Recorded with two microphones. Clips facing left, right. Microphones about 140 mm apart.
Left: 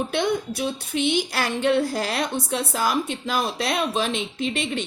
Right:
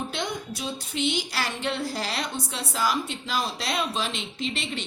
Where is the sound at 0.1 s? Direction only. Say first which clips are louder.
Left 8 dB; 55° left (ahead or behind).